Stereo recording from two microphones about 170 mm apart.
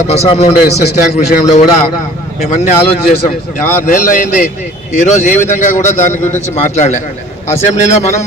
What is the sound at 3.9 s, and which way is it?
Speech, 50° left (ahead or behind).